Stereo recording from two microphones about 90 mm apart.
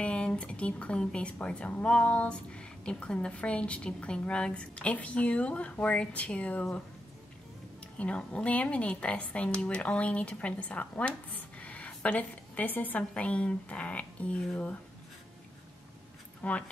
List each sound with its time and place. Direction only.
0.0 s speech: 10° left (ahead or behind)
8.0 s speech: 15° left (ahead or behind)
16.4 s speech: 15° left (ahead or behind)